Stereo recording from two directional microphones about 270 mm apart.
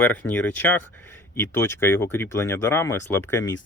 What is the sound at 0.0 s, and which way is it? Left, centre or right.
Speech, centre.